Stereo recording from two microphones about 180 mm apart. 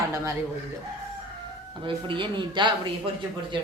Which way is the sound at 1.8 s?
30° right (ahead or behind).